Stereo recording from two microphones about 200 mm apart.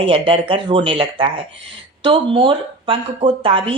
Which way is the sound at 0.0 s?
25° right (ahead or behind).